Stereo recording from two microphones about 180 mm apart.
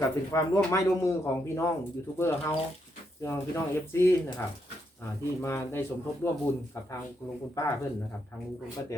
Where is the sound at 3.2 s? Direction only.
15° left (ahead or behind).